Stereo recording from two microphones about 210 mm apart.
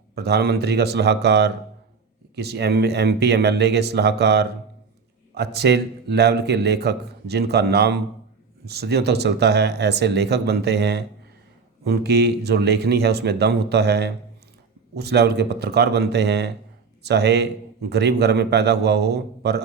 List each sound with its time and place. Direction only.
0.2 s speech: 50° right (ahead or behind)